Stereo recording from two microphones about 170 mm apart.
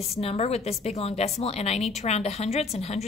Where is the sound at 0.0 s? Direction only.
35° left (ahead or behind).